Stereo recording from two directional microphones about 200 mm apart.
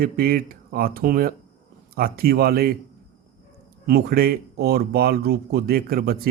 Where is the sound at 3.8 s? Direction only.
50° right (ahead or behind).